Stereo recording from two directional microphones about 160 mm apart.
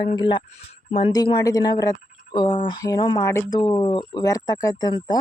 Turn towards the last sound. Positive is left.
turn(degrees=25)  # may be behind; listen again after turning